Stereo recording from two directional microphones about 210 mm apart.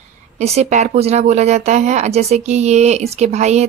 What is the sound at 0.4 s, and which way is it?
Speech, 30° right (ahead or behind).